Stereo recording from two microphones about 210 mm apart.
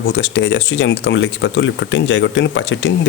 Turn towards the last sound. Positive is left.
turn(degrees=60)  # may be behind; listen again after turning